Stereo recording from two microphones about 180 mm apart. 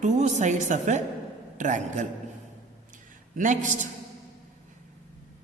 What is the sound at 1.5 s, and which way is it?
Mantra, 45° right (ahead or behind).